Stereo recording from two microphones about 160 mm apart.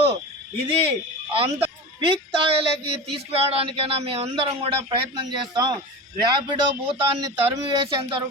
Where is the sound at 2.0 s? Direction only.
30° right (ahead or behind).